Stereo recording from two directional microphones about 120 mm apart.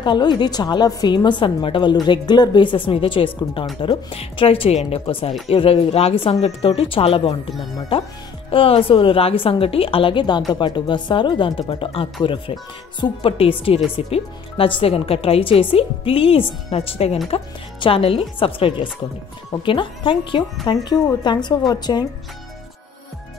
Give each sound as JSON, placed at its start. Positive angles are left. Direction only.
{"t": 0.0, "sound": "a woman's voice", "side_deg": 40}
{"t": 8.5, "sound": "a woman's voice", "side_deg": 50}